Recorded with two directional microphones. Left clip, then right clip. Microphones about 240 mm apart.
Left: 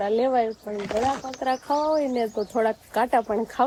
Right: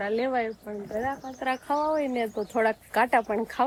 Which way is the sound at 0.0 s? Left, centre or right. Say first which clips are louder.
Left 5 dB; centre.